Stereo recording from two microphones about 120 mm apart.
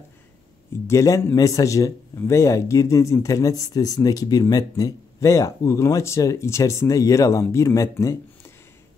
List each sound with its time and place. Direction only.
0.8 s a man's voice: 25° left (ahead or behind)